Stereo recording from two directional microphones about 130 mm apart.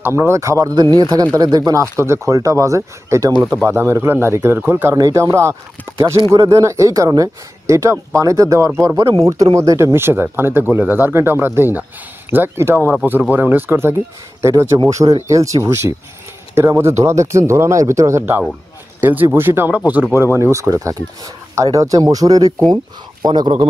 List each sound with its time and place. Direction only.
0.0 s speech: 20° right (ahead or behind)